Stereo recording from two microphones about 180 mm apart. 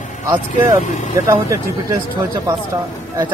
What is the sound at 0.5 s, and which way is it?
Speech, 45° left (ahead or behind).